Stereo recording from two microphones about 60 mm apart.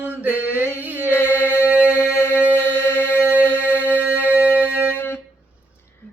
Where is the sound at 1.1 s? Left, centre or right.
Left.